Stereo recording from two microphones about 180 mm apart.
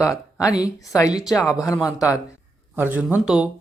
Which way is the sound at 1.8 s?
20° left (ahead or behind).